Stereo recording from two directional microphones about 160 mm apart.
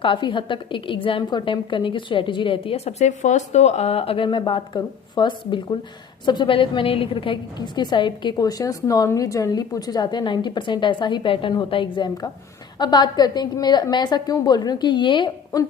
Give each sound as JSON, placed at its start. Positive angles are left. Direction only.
{"t": 0.0, "sound": "a woman's voice", "side_deg": 30}